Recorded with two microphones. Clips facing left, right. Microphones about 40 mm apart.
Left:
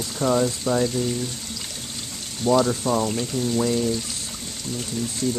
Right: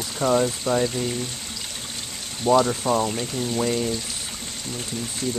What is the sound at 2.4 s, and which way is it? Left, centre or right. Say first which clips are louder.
Speech: right 1 dB; centre.